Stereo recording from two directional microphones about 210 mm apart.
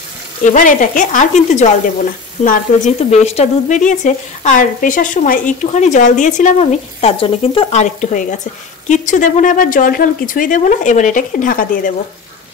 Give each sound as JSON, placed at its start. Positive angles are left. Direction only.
{"t": 0.5, "sound": "speech", "side_deg": 40}